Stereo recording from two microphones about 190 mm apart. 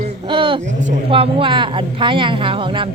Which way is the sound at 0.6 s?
40° right (ahead or behind).